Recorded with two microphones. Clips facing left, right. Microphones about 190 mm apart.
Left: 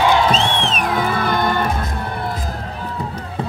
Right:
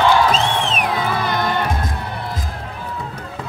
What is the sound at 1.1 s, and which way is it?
Music, 55° left (ahead or behind).